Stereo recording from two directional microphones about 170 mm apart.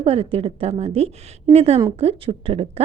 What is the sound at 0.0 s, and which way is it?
A woman's voice, 35° right (ahead or behind).